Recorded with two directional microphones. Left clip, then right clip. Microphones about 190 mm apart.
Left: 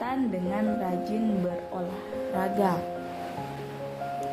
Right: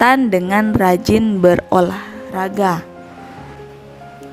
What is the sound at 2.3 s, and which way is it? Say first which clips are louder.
Speech: right 10 dB; 40° right (ahead or behind).